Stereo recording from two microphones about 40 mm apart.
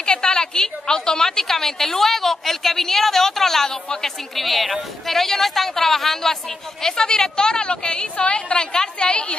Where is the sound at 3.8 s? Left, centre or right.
Centre.